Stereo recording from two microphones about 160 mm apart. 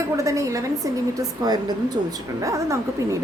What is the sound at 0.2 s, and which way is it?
A woman's voice, 20° right (ahead or behind).